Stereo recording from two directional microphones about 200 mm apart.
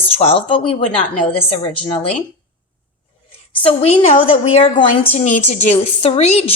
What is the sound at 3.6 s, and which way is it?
A woman's voice, 30° left (ahead or behind).